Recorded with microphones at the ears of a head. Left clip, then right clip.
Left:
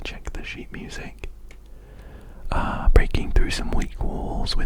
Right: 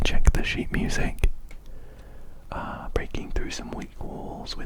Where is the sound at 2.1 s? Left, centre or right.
Left.